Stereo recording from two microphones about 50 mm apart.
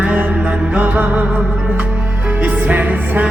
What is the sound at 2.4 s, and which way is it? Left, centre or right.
Music, right.